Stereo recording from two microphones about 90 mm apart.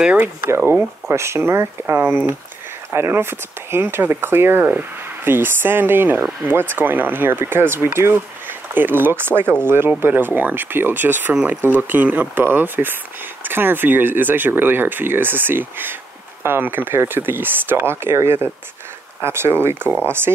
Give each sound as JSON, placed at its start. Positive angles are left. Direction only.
{"t": 0.0, "sound": "speech", "side_deg": -20}